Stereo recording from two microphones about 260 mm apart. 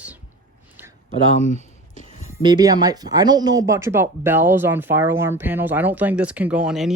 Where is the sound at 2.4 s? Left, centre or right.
Centre.